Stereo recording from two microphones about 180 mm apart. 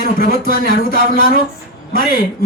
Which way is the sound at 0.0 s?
55° left (ahead or behind).